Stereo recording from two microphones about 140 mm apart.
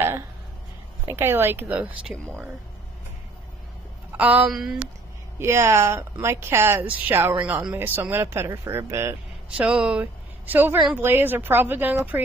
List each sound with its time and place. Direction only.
1.0 s speech: 15° right (ahead or behind)
4.2 s speech: 10° right (ahead or behind)
5.4 s speech: 20° right (ahead or behind)
9.6 s a woman's voice: 5° right (ahead or behind)